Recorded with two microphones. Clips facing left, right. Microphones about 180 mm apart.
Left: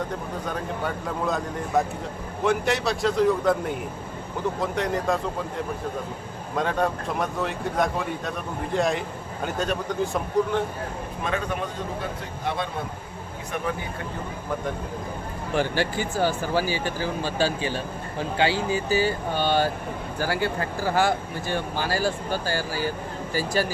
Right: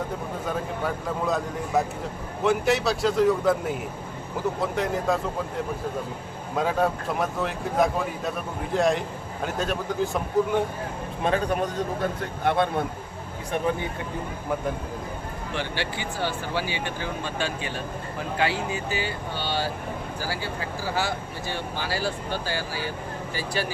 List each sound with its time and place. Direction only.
0.4 s speech: centre (ahead or behind)
11.2 s speech: 35° right (ahead or behind)
12.2 s speech: 55° right (ahead or behind)
15.5 s speech: 45° left (ahead or behind)